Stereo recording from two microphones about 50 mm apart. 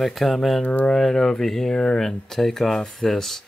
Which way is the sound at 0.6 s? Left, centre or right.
Left.